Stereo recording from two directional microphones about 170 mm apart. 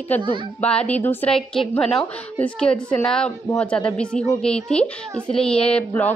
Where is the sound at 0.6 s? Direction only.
5° left (ahead or behind).